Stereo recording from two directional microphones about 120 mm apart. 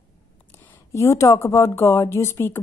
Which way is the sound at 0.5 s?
15° left (ahead or behind).